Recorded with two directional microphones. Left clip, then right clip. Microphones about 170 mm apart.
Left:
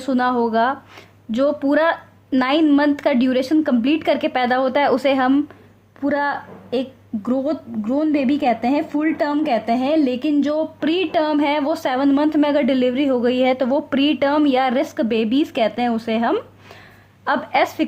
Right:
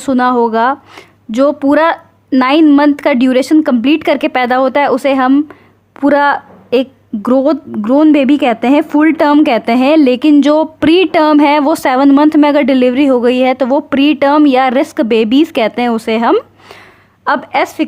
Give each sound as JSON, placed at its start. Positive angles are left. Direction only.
{"t": 0.0, "sound": "speech", "side_deg": -30}
{"t": 6.0, "sound": "a woman's voice", "side_deg": -45}